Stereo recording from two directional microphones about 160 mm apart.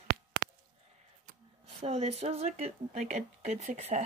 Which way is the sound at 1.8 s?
40° right (ahead or behind).